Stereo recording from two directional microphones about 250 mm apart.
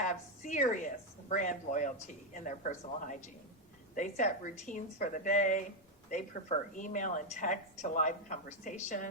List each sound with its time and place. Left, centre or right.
0.0 s a woman's voice: left